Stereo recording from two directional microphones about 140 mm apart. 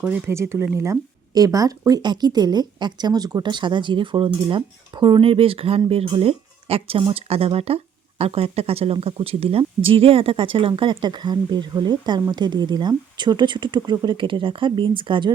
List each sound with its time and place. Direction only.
0.0 s speech: 15° right (ahead or behind); by 15.3 s 35° right (ahead or behind)